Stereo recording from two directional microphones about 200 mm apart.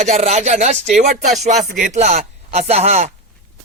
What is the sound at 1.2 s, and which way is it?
Music, centre (ahead or behind).